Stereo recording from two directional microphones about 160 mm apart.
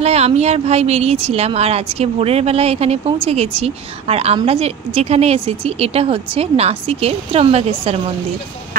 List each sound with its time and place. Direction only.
0.0 s a woman's voice: 40° right (ahead or behind)